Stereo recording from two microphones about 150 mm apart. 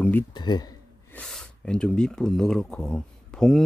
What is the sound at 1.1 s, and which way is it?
Speech, 5° left (ahead or behind).